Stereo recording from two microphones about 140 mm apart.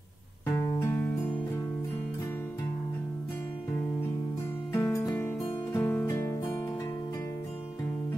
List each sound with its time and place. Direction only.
0.5 s music: 20° left (ahead or behind)
4.7 s music: 20° left (ahead or behind)